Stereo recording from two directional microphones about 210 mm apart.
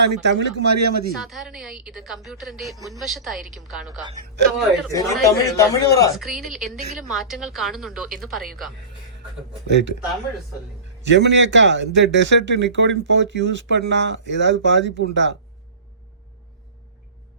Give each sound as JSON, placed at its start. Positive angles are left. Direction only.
{"t": 0.0, "sound": "a man's voice", "side_deg": -55}
{"t": 1.1, "sound": "a woman's voice", "side_deg": 0}
{"t": 2.7, "sound": "a woman's voice", "side_deg": -15}
{"t": 3.0, "sound": "a woman's voice", "side_deg": 0}
{"t": 4.9, "sound": "a man's voice", "side_deg": 15}
{"t": 6.1, "sound": "a woman's voice", "side_deg": 0}
{"t": 9.6, "sound": "a man's voice", "side_deg": -55}
{"t": 11.0, "sound": "a man's voice", "side_deg": -60}